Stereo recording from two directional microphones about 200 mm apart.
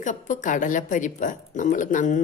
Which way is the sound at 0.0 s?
40° left (ahead or behind).